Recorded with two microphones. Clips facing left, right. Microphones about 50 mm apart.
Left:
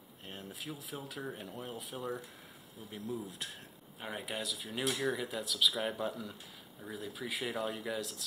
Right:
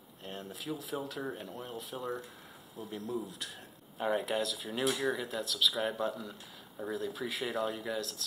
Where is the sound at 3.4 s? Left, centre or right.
Left.